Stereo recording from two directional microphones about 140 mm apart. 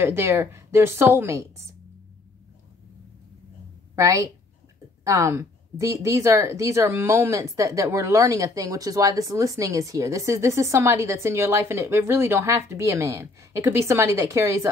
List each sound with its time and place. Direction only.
0.0 s a woman's voice: 20° right (ahead or behind)
3.9 s a woman's voice: 20° right (ahead or behind)